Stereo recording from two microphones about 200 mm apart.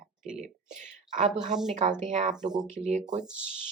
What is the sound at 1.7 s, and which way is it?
Speech, 35° right (ahead or behind).